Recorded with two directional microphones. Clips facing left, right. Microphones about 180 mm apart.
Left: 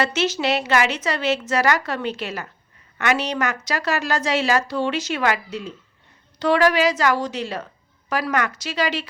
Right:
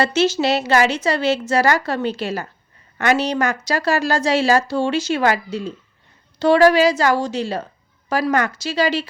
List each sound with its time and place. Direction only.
0.0 s a woman's voice: 30° right (ahead or behind)